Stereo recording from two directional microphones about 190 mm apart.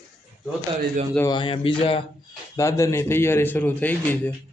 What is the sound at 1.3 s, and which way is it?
Speech, 25° left (ahead or behind).